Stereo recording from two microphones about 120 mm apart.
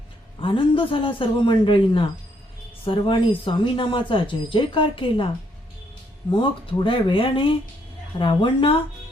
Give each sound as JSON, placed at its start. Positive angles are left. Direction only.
{"t": 0.3, "sound": "speech", "side_deg": 45}
{"t": 6.3, "sound": "speech", "side_deg": 45}